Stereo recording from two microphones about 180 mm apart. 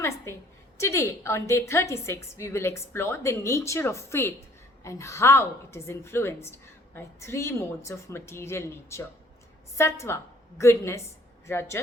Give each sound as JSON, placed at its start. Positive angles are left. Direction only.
{"t": 0.3, "sound": "a woman's voice", "side_deg": 15}